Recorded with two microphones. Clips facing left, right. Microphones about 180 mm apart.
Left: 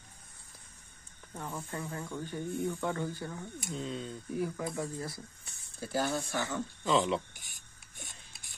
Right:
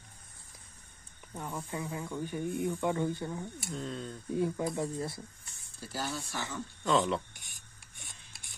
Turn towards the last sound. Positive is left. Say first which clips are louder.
# even
turn(degrees=0)  # may be behind; listen again after turning